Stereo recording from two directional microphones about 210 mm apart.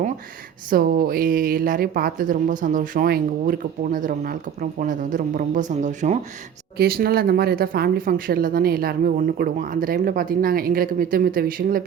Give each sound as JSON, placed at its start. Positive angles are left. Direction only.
{"t": 0.7, "sound": "a woman's voice", "side_deg": -45}
{"t": 6.7, "sound": "speech", "side_deg": -45}